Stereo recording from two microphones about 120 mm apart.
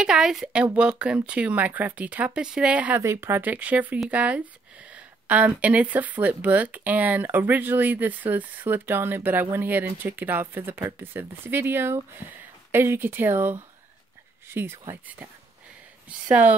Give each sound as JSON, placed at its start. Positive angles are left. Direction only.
{"t": 0.0, "sound": "a woman's voice", "side_deg": -5}
{"t": 3.0, "sound": "speech", "side_deg": -20}
{"t": 16.3, "sound": "speech", "side_deg": -10}